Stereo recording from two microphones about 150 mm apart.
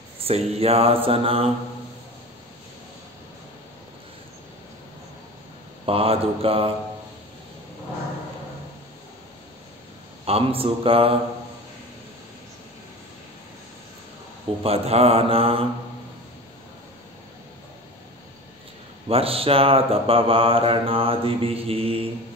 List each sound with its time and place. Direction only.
0.2 s mantra: 40° right (ahead or behind)
5.9 s mantra: 40° right (ahead or behind)
10.2 s mantra: 40° right (ahead or behind)
14.6 s mantra: 40° right (ahead or behind)
19.0 s mantra: 40° right (ahead or behind)